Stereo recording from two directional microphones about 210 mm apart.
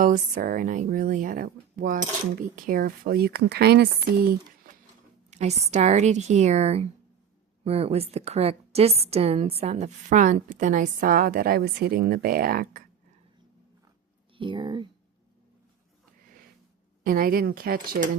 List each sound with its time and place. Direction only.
0.0 s a woman's voice: 40° right (ahead or behind)
5.3 s a woman's voice: 30° right (ahead or behind)
14.3 s a woman's voice: 20° right (ahead or behind)
17.0 s a woman's voice: 40° right (ahead or behind)